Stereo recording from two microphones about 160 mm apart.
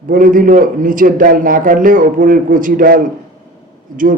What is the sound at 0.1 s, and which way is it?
A man's voice, 60° right (ahead or behind).